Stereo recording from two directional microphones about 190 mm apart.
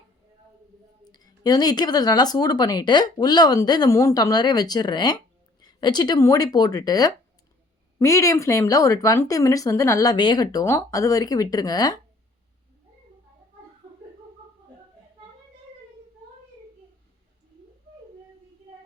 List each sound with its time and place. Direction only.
1.0 s speech: 20° left (ahead or behind)